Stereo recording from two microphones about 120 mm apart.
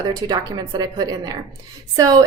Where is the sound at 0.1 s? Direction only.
35° right (ahead or behind).